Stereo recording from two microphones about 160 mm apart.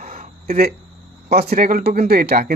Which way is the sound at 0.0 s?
65° right (ahead or behind).